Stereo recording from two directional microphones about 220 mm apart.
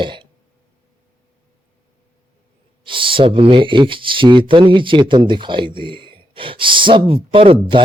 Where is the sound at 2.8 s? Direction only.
25° right (ahead or behind).